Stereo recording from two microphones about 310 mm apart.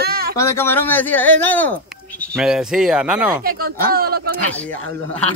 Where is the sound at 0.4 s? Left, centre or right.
Centre.